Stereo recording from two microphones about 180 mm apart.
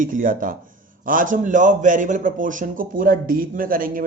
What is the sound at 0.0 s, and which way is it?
A man's voice, 50° right (ahead or behind).